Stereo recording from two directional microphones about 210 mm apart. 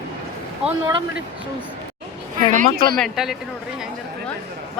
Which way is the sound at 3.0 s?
Centre (ahead or behind).